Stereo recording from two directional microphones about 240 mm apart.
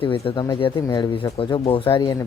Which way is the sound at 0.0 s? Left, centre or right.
Left.